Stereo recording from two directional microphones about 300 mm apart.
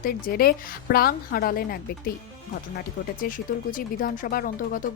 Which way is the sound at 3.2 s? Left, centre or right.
Left.